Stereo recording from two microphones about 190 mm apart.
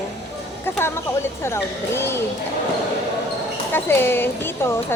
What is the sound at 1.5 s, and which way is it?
Speech, 15° left (ahead or behind).